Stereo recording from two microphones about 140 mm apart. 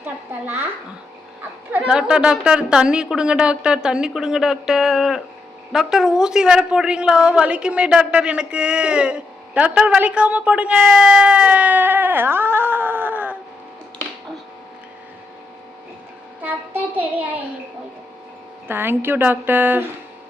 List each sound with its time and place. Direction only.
0.0 s a woman's voice: 15° right (ahead or behind)
1.7 s a woman's voice: 5° right (ahead or behind)
16.4 s a woman's voice: 15° right (ahead or behind)
18.7 s a woman's voice: 15° right (ahead or behind)